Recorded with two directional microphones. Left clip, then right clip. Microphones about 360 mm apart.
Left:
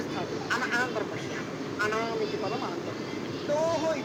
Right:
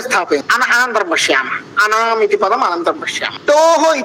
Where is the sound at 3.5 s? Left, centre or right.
Right.